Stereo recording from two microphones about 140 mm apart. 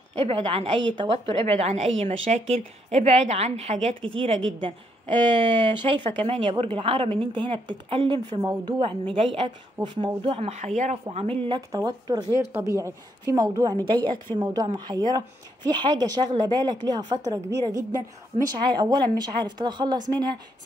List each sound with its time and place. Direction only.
0.2 s a woman's voice: 40° right (ahead or behind)
4.0 s a woman's voice: 40° right (ahead or behind)
11.1 s speech: 40° right (ahead or behind)
18.3 s speech: 40° right (ahead or behind)